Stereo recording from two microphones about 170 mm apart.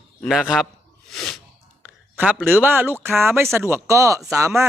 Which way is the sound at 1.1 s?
Centre (ahead or behind).